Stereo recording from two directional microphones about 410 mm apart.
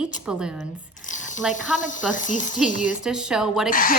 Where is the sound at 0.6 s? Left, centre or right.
Centre.